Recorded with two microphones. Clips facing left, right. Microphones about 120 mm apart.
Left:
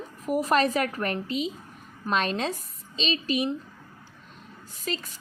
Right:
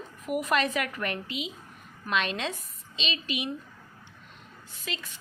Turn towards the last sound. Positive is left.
turn(degrees=40)  # may be behind; listen again after turning